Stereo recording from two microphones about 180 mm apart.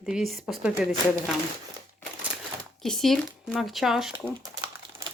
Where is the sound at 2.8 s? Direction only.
Centre (ahead or behind).